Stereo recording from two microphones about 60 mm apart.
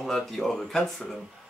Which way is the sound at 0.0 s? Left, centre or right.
Centre.